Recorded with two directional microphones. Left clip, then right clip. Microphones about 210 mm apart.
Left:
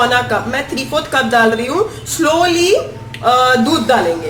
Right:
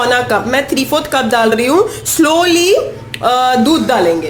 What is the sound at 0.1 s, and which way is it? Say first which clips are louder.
A woman's voice: right 3 dB; 50° right (ahead or behind).